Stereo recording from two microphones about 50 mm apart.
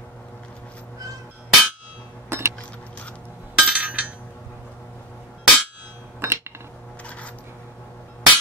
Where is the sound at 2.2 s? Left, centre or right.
Right.